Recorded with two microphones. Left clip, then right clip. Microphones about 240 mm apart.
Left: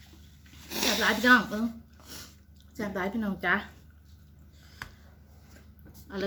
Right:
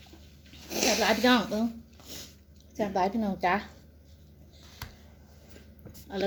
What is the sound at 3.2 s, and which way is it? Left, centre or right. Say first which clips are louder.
Speech: right 1 dB; right.